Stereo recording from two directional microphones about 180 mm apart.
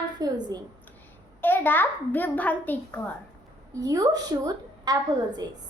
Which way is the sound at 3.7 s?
20° right (ahead or behind).